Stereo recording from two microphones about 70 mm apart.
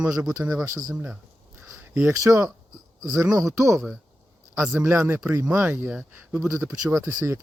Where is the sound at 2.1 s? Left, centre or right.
Right.